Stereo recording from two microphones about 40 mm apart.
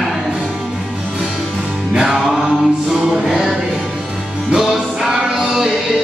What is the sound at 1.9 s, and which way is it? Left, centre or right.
Music, centre.